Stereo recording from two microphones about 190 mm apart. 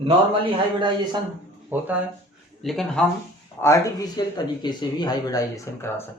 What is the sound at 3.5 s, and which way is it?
Speech, 15° left (ahead or behind).